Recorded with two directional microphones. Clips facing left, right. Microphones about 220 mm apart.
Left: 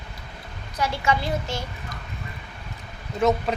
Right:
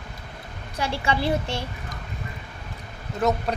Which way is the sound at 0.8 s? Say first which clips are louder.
Left 1 dB; 30° right (ahead or behind).